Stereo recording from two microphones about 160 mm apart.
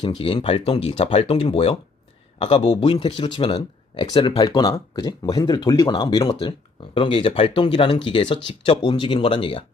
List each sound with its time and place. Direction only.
0.0 s speech: 35° left (ahead or behind)
2.4 s speech: 30° left (ahead or behind)